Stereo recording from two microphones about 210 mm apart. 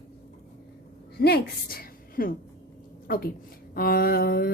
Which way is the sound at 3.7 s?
45° left (ahead or behind).